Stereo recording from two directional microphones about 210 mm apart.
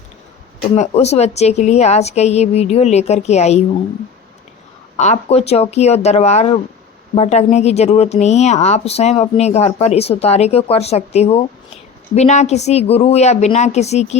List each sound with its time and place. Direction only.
0.8 s speech: 30° left (ahead or behind)
4.9 s speech: 30° left (ahead or behind)